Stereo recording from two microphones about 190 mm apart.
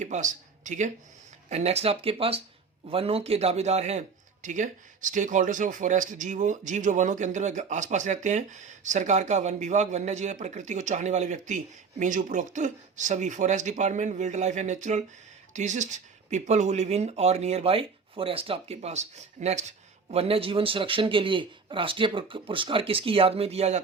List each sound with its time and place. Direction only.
0.0 s speech: 40° right (ahead or behind)